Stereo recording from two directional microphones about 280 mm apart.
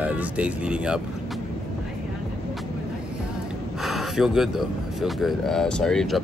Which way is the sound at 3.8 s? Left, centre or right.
Centre.